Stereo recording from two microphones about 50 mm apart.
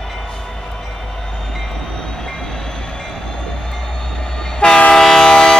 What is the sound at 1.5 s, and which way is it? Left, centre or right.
Train, centre.